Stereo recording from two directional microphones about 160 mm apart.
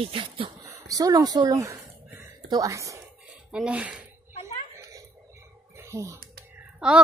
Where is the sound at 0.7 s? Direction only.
20° right (ahead or behind).